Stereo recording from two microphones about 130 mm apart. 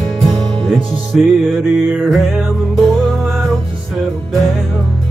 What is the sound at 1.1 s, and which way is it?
Music, centre (ahead or behind).